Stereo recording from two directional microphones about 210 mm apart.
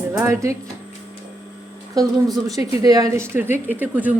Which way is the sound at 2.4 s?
15° right (ahead or behind).